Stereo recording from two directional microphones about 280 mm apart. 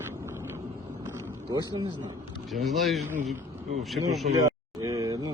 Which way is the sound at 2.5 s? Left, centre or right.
Centre.